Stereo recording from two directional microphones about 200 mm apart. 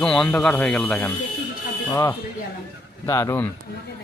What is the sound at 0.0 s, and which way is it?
A man's voice, 5° left (ahead or behind).